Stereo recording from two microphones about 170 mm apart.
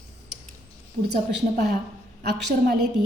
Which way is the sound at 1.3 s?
75° right (ahead or behind).